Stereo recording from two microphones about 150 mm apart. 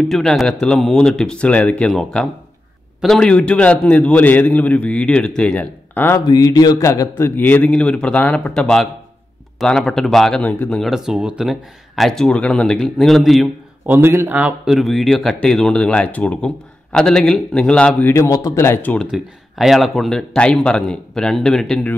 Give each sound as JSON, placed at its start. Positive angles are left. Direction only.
{"t": 0.1, "sound": "a man's voice", "side_deg": 0}
{"t": 6.2, "sound": "a man's voice", "side_deg": 25}
{"t": 13.8, "sound": "speech", "side_deg": -15}
{"t": 18.1, "sound": "a man's voice", "side_deg": 20}
{"t": 19.0, "sound": "speech", "side_deg": -5}